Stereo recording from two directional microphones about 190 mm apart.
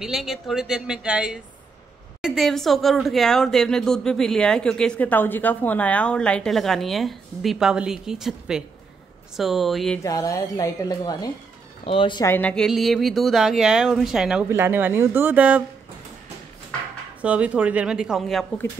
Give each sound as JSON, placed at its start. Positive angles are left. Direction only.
{"t": 0.0, "sound": "speech", "side_deg": 0}
{"t": 10.0, "sound": "speech", "side_deg": 15}
{"t": 12.3, "sound": "speech", "side_deg": 10}
{"t": 17.2, "sound": "speech", "side_deg": -5}